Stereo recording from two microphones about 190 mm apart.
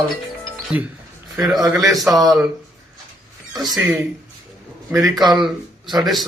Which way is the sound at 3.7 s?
5° right (ahead or behind).